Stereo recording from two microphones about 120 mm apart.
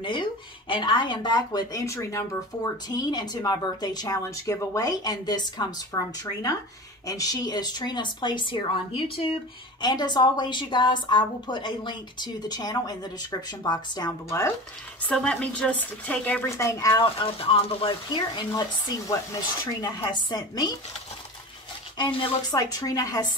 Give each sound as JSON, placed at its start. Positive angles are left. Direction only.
{"t": 0.0, "sound": "speech", "side_deg": 40}
{"t": 9.8, "sound": "speech", "side_deg": 35}
{"t": 15.0, "sound": "speech", "side_deg": 10}
{"t": 16.4, "sound": "speech", "side_deg": 25}
{"t": 16.9, "sound": "speech", "side_deg": 45}
{"t": 19.6, "sound": "speech", "side_deg": 35}
{"t": 21.9, "sound": "speech", "side_deg": 40}